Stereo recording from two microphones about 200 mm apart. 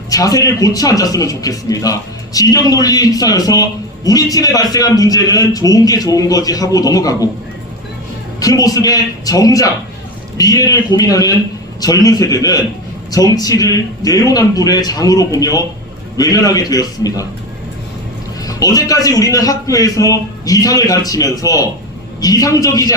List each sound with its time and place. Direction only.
0.1 s a man's voice: 20° left (ahead or behind)
8.4 s a man's voice: 20° left (ahead or behind)
18.4 s a man's voice: 15° left (ahead or behind)